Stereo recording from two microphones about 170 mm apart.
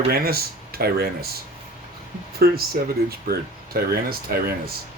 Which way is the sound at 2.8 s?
55° right (ahead or behind).